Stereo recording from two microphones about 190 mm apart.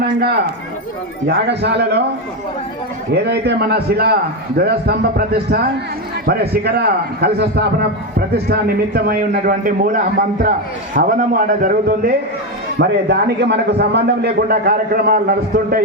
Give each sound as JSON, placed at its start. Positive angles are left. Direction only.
{"t": 0.0, "sound": "a man's voice", "side_deg": -55}
{"t": 3.4, "sound": "a man's voice", "side_deg": -55}
{"t": 12.8, "sound": "a man's voice", "side_deg": -65}